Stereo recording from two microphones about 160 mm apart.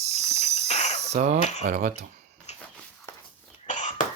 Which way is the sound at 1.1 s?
50° right (ahead or behind).